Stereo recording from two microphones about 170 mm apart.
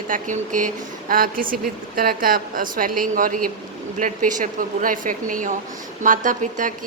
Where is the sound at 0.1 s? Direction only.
50° right (ahead or behind).